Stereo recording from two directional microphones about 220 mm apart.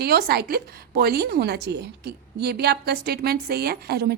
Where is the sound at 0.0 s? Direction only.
45° right (ahead or behind).